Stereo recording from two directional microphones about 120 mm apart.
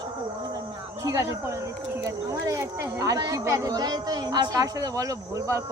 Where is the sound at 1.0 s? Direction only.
25° right (ahead or behind).